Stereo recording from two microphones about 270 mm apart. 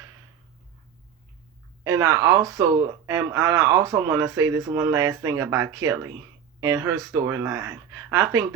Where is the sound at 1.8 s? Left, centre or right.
Centre.